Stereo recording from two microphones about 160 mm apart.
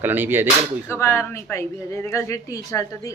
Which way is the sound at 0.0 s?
10° right (ahead or behind).